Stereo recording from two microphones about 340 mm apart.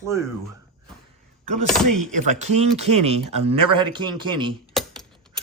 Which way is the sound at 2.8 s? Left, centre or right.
Centre.